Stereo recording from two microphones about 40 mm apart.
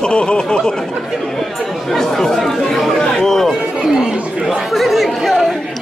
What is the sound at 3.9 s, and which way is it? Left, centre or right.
Chatter, centre.